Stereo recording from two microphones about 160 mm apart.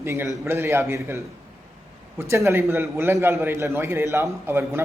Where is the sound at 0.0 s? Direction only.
15° right (ahead or behind).